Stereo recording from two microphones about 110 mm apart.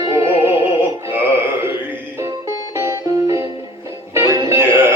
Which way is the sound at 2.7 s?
25° right (ahead or behind).